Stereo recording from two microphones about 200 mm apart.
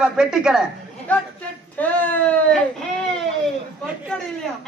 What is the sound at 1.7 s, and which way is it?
Speech, 10° left (ahead or behind).